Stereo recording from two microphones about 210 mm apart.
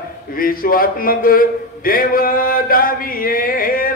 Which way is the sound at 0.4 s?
45° left (ahead or behind).